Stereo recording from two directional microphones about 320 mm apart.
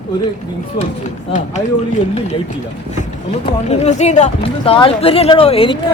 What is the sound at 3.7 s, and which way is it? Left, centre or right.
Speech, left.